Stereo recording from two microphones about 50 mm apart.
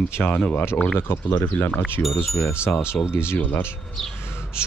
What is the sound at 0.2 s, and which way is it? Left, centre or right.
Speech, left.